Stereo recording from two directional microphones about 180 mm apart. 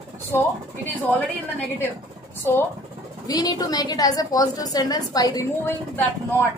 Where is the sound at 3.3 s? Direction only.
20° left (ahead or behind).